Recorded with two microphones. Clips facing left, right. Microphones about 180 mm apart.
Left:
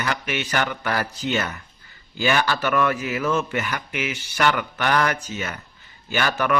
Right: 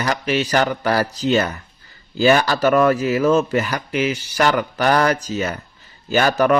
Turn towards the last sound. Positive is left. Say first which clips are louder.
# right 7 dB
turn(degrees=-40)  # may be behind; listen again after turning